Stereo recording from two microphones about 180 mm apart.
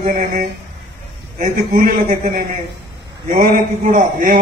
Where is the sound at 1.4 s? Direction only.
55° right (ahead or behind).